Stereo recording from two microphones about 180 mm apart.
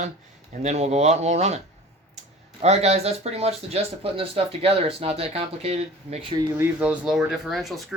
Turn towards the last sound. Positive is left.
turn(degrees=0)  # may be behind; listen again after turning